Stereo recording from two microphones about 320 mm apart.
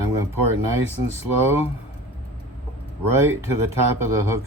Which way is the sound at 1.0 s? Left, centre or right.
Right.